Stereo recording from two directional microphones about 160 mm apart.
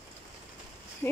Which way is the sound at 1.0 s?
10° left (ahead or behind).